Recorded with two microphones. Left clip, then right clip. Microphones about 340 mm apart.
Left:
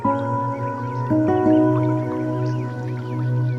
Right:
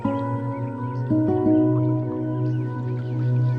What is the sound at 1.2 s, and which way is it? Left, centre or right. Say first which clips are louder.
Music: left 3 dB; left.